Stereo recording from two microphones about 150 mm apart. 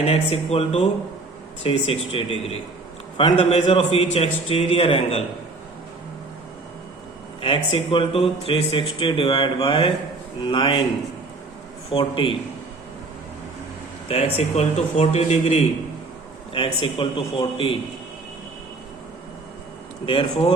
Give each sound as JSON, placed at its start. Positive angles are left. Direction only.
{"t": 0.0, "sound": "a man's voice", "side_deg": 40}
{"t": 7.4, "sound": "a man's voice", "side_deg": 35}
{"t": 11.9, "sound": "a man's voice", "side_deg": 35}
{"t": 14.1, "sound": "a man's voice", "side_deg": 40}
{"t": 20.1, "sound": "a man's voice", "side_deg": 35}